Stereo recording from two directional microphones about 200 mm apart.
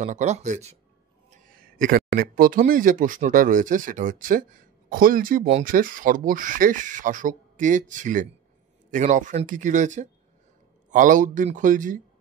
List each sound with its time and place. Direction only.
0.0 s speech: 35° right (ahead or behind)
1.8 s speech: 45° right (ahead or behind)